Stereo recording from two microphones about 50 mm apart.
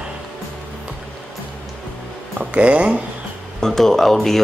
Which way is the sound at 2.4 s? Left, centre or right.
Right.